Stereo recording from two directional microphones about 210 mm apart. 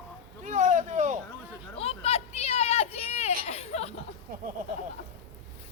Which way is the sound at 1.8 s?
30° left (ahead or behind).